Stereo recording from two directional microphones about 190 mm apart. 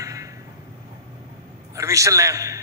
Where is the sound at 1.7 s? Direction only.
15° right (ahead or behind).